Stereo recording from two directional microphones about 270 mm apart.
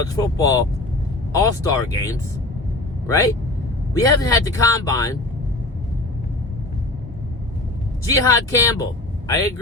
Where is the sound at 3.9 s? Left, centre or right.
Centre.